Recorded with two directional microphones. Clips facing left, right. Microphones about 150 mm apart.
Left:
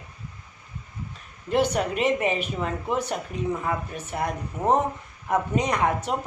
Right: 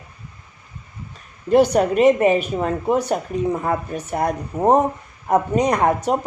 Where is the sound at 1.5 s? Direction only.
40° right (ahead or behind).